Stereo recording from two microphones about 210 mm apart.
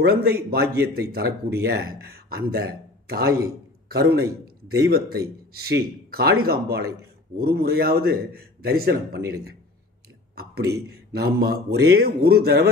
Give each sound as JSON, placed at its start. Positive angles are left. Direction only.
{"t": 0.0, "sound": "speech", "side_deg": -45}
{"t": 10.3, "sound": "a sound", "side_deg": -50}
{"t": 10.9, "sound": "speech", "side_deg": -50}